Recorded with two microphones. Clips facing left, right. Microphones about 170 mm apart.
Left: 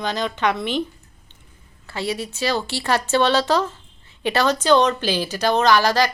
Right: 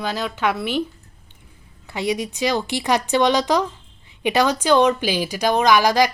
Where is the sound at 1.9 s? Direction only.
15° right (ahead or behind).